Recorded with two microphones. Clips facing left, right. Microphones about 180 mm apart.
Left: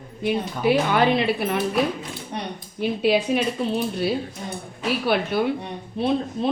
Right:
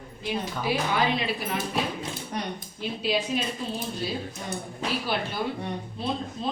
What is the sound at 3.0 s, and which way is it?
Speech, 60° left (ahead or behind).